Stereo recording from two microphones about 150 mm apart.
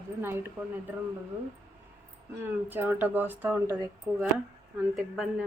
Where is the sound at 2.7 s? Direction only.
15° right (ahead or behind).